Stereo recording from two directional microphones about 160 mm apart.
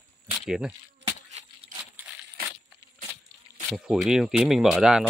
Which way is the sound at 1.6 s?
40° right (ahead or behind).